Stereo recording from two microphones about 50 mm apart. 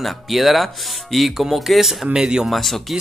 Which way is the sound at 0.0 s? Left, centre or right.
Centre.